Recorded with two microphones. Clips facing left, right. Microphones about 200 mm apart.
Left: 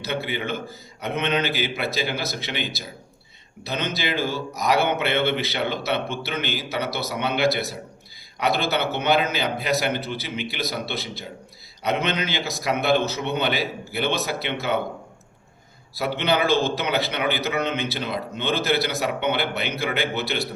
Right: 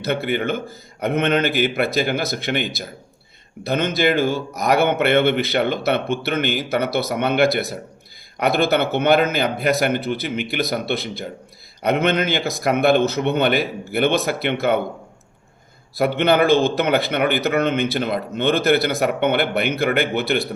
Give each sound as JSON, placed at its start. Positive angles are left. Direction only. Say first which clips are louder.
{"t": 0.0, "sound": "a man's voice", "louder": "right 6 dB", "side_deg": -55}
{"t": 16.0, "sound": "a man's voice", "louder": "right 6 dB", "side_deg": -55}